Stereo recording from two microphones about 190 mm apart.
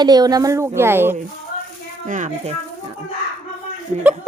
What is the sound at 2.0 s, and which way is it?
Speech, 40° right (ahead or behind).